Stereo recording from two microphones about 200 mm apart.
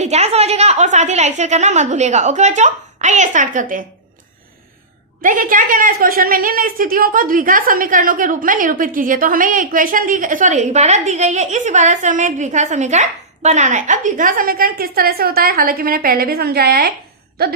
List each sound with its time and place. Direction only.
0.0 s a woman's voice: 30° right (ahead or behind)
5.2 s a woman's voice: 45° right (ahead or behind)